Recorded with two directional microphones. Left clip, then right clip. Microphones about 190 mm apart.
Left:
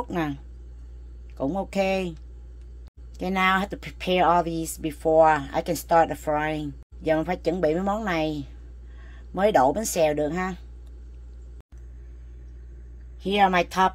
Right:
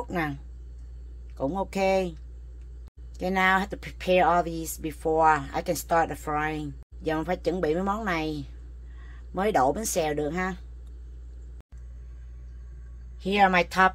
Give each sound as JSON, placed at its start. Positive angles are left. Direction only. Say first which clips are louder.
{"t": 0.0, "sound": "speech", "louder": "left 2 dB", "side_deg": 20}
{"t": 1.4, "sound": "speech", "louder": "left 1 dB", "side_deg": 25}
{"t": 3.2, "sound": "speech", "louder": "left 1 dB", "side_deg": 25}
{"t": 13.2, "sound": "speech", "louder": "left 1 dB", "side_deg": 20}